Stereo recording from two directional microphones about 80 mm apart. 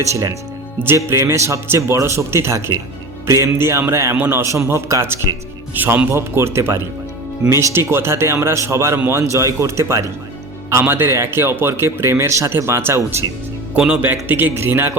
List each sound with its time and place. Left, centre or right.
0.0 s a man's voice: right
13.7 s speech: centre
14.0 s a man's voice: right